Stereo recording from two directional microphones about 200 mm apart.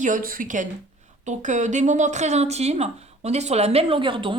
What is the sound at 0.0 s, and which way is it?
Speech, 45° right (ahead or behind).